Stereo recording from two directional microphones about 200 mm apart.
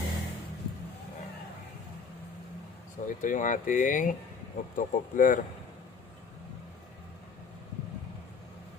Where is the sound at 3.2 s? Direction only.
40° left (ahead or behind).